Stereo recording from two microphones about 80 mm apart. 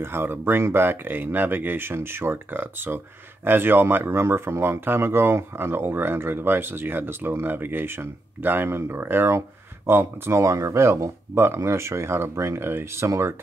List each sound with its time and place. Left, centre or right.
0.0 s speech: right